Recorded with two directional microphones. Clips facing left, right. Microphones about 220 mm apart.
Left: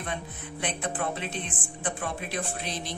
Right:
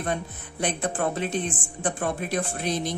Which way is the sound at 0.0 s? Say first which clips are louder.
Right 6 dB; 45° right (ahead or behind).